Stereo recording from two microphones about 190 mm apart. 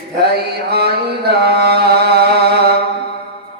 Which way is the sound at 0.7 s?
60° right (ahead or behind).